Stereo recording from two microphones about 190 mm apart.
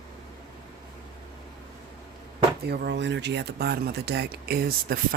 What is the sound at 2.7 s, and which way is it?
Speech, 60° right (ahead or behind).